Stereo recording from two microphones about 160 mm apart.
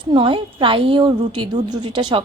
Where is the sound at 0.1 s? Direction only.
30° right (ahead or behind).